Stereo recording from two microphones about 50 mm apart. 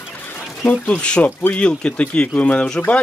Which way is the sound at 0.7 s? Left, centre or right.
Left.